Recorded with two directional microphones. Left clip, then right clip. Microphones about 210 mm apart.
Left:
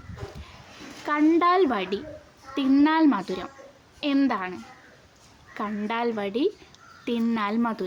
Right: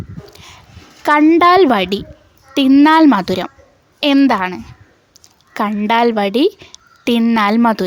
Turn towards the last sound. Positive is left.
turn(degrees=-50)  # may be behind; listen again after turning